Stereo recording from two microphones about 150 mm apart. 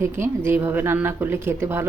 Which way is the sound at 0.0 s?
15° right (ahead or behind).